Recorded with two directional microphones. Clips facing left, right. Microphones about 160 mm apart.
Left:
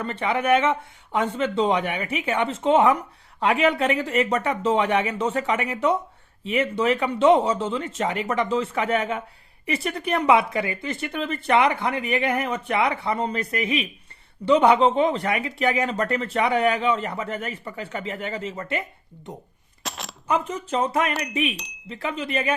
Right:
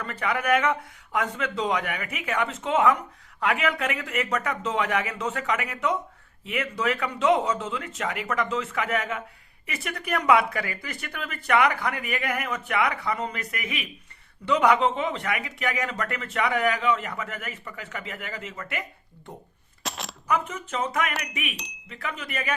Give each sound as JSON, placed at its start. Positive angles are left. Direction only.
{"t": 0.0, "sound": "speech", "side_deg": 25}
{"t": 19.8, "sound": "a sound", "side_deg": 0}
{"t": 20.2, "sound": "speech", "side_deg": 30}
{"t": 21.1, "sound": "chime", "side_deg": 0}
{"t": 21.8, "sound": "speech", "side_deg": 30}